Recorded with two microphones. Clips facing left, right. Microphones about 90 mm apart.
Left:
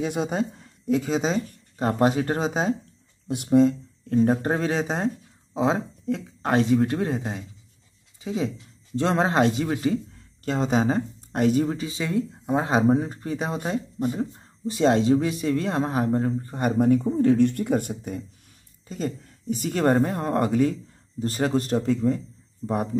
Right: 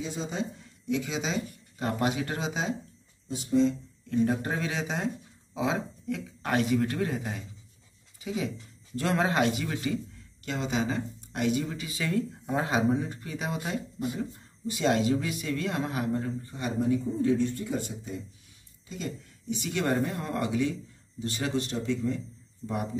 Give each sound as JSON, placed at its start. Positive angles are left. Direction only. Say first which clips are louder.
{"t": 0.0, "sound": "speech", "louder": "left 8 dB", "side_deg": 60}
{"t": 3.3, "sound": "speech", "louder": "left 6 dB", "side_deg": 60}
{"t": 4.1, "sound": "speech", "louder": "left 6 dB", "side_deg": 35}
{"t": 12.0, "sound": "speech", "louder": "even", "side_deg": 20}
{"t": 18.9, "sound": "speech", "louder": "left 7 dB", "side_deg": 40}